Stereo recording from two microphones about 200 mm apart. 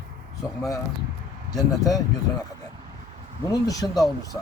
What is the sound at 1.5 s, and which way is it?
Speech, 20° left (ahead or behind).